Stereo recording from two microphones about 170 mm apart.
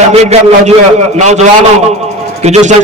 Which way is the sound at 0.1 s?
40° right (ahead or behind).